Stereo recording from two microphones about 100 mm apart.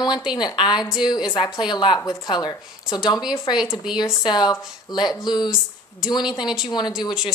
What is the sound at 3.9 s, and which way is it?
A woman's voice, 50° left (ahead or behind).